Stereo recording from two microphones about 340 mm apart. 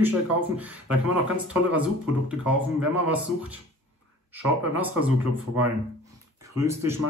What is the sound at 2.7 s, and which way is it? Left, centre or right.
Speech, centre.